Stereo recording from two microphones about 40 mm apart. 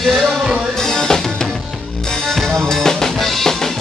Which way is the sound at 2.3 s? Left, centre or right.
Centre.